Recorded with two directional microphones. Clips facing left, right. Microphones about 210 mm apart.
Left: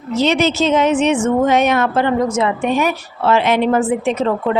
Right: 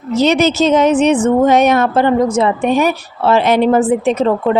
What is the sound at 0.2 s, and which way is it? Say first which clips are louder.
A woman's voice: right 3 dB; 40° right (ahead or behind).